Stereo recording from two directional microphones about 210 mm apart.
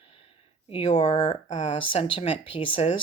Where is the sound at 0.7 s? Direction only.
30° left (ahead or behind).